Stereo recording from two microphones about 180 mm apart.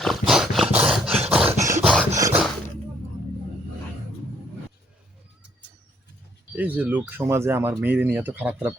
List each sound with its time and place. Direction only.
0.0 s dog: centre (ahead or behind)
1.5 s a sound: 15° right (ahead or behind)
6.6 s speech: 10° right (ahead or behind)